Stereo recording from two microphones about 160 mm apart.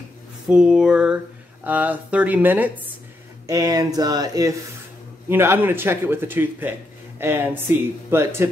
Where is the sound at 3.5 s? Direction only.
25° right (ahead or behind).